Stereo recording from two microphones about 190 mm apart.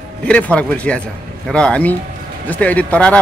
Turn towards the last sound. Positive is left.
turn(degrees=5)  # may be behind; listen again after turning